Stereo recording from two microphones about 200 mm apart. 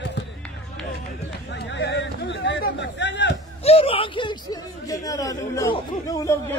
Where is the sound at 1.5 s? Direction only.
60° left (ahead or behind).